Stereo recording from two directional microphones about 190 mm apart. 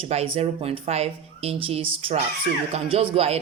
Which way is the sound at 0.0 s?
35° right (ahead or behind).